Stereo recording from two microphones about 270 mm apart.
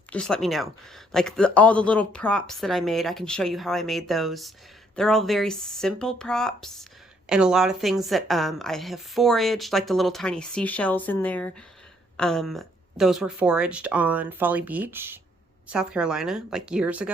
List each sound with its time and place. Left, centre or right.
0.1 s a woman's voice: centre